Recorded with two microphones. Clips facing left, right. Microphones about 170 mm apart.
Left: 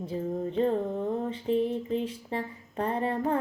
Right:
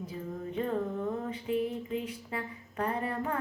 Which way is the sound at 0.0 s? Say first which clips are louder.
Left 7 dB; 30° left (ahead or behind).